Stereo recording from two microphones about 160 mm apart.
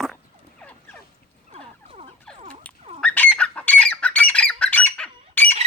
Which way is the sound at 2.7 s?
10° left (ahead or behind).